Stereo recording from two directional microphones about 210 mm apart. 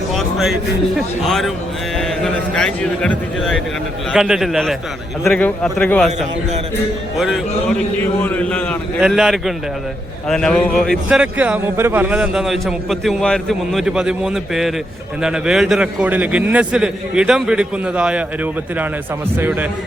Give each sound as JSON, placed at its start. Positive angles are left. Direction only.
{"t": 0.1, "sound": "a sound", "side_deg": 0}
{"t": 0.9, "sound": "a man's voice", "side_deg": 0}
{"t": 8.2, "sound": "a man's voice", "side_deg": 5}
{"t": 19.4, "sound": "a man's voice", "side_deg": -10}